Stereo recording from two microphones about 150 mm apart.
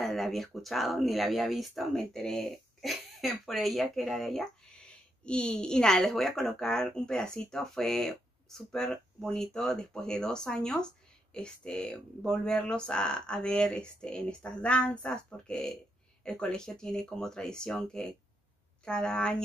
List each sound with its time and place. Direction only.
0.0 s speech: centre (ahead or behind)